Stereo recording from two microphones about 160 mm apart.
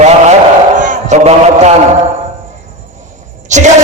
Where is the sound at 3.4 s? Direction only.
50° right (ahead or behind).